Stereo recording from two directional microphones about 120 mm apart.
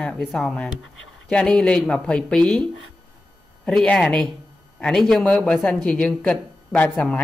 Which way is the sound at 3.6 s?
5° left (ahead or behind).